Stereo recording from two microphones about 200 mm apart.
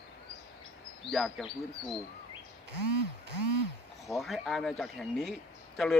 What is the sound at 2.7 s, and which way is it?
Speech, 55° right (ahead or behind).